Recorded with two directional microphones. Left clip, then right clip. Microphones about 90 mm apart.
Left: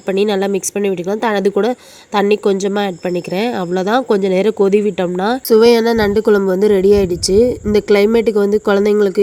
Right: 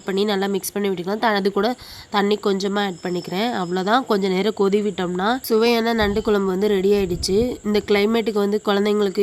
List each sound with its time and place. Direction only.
0.1 s a woman's voice: 25° left (ahead or behind)
2.7 s speech: 35° left (ahead or behind)
4.1 s speech: 15° left (ahead or behind)
4.8 s speech: 30° left (ahead or behind)